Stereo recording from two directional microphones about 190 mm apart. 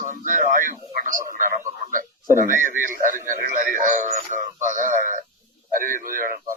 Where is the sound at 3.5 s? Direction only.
45° right (ahead or behind).